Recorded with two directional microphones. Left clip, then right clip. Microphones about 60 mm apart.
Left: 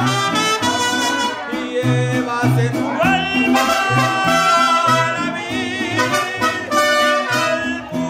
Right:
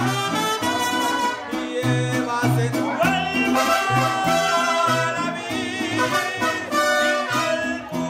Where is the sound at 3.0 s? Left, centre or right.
Centre.